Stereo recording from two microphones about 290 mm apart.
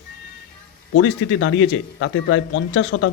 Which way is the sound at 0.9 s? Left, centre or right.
Left.